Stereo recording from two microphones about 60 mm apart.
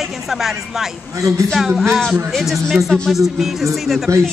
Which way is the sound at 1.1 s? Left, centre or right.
Right.